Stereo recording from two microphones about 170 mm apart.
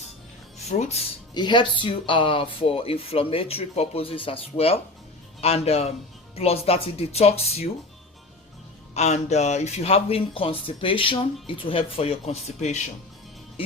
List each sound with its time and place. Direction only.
0.6 s speech: 40° left (ahead or behind)
1.3 s speech: 25° left (ahead or behind)
9.0 s speech: 40° left (ahead or behind)